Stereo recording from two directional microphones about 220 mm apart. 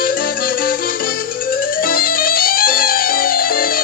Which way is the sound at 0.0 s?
40° left (ahead or behind).